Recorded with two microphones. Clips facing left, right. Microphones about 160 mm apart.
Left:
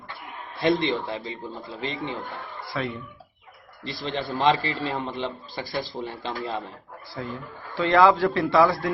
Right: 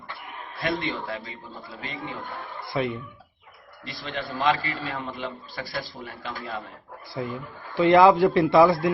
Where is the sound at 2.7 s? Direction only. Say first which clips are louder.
Right 3 dB; 20° right (ahead or behind).